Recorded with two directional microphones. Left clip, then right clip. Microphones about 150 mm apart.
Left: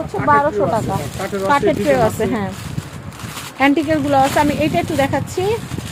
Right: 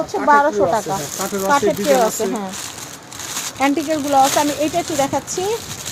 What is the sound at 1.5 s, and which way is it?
A woman's voice, 30° left (ahead or behind).